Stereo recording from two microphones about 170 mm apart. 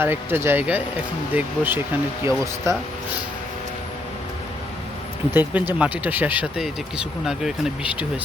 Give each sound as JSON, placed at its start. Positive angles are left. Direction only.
{"t": 0.0, "sound": "speech", "side_deg": -15}
{"t": 5.3, "sound": "speech", "side_deg": -10}